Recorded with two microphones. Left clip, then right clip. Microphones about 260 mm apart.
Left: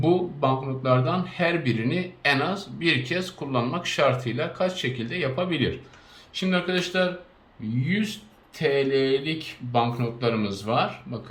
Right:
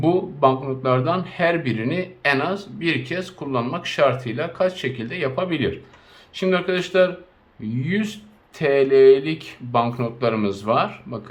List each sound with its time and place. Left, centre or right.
0.0 s speech: centre